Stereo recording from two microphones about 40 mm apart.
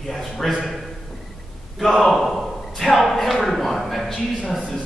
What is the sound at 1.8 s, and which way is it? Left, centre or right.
A man's voice, centre.